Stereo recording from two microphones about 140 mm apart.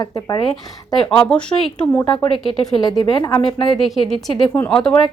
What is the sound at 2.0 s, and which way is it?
Speech, 35° left (ahead or behind).